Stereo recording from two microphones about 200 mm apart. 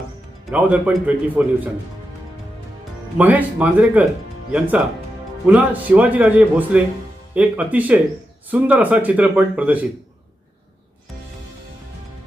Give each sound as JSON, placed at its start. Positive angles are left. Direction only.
{"t": 0.5, "sound": "speech", "side_deg": -5}
{"t": 3.2, "sound": "speech", "side_deg": -10}